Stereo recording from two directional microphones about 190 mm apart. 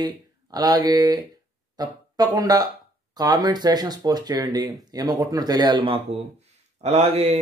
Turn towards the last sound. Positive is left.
turn(degrees=-30)  # may be behind; listen again after turning